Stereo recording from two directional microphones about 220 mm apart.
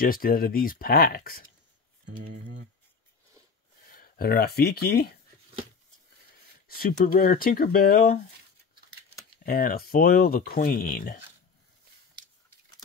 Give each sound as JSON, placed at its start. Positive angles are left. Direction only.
{"t": 0.0, "sound": "speech", "side_deg": 40}
{"t": 3.9, "sound": "speech", "side_deg": 40}
{"t": 6.7, "sound": "speech", "side_deg": 40}
{"t": 9.4, "sound": "speech", "side_deg": 40}